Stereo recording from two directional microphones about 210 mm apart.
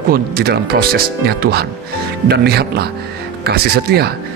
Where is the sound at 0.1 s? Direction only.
45° right (ahead or behind).